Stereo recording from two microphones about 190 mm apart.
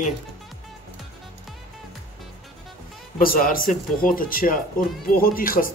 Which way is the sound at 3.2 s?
50° left (ahead or behind).